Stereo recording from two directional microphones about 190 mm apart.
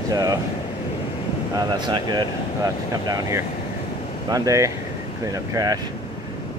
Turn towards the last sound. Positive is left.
turn(degrees=-20)  # may be behind; listen again after turning